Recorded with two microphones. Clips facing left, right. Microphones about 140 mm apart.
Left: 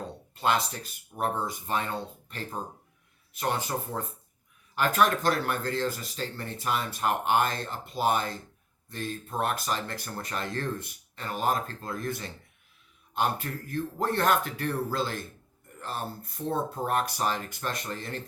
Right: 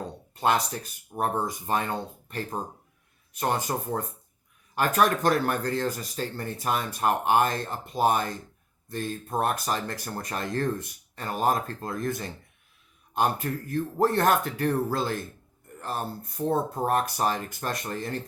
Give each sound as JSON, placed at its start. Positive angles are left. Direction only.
{"t": 0.3, "sound": "speech", "side_deg": -45}